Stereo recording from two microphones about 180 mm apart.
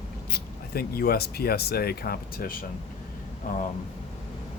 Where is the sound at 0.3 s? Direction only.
60° left (ahead or behind).